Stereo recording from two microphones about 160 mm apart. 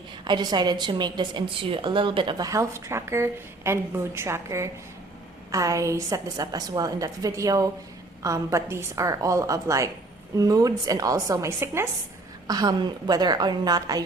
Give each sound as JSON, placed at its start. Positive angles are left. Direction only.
{"t": 0.3, "sound": "a woman's voice", "side_deg": -30}